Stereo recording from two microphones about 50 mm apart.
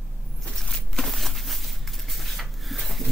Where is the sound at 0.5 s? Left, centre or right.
Centre.